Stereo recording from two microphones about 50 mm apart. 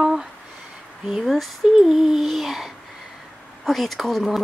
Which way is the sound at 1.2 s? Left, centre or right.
Centre.